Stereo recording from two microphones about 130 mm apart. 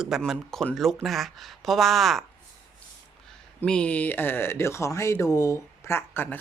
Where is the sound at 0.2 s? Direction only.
5° left (ahead or behind).